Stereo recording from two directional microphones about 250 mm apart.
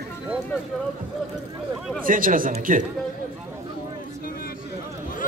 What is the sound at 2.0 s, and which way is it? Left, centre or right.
Speech, right.